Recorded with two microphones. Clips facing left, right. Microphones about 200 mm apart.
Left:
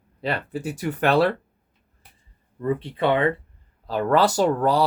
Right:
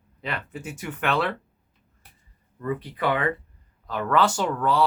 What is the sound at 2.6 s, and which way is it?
Speech, 25° left (ahead or behind).